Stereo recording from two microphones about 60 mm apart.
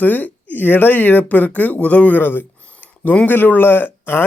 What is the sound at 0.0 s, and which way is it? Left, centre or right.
Speech, left.